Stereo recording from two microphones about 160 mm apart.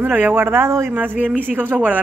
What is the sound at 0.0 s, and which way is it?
A woman's voice, 10° right (ahead or behind).